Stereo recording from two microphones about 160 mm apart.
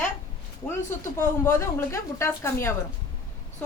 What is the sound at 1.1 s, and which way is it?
A woman's voice, 15° left (ahead or behind).